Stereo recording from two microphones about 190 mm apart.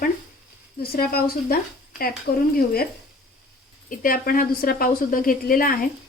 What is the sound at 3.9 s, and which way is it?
A woman's voice, 50° left (ahead or behind).